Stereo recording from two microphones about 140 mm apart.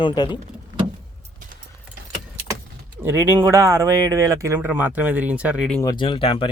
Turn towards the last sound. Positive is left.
turn(degrees=40)  # may be behind; listen again after turning